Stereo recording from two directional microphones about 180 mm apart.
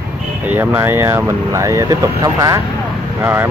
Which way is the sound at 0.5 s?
10° right (ahead or behind).